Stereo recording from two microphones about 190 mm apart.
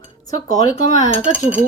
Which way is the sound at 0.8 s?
40° left (ahead or behind).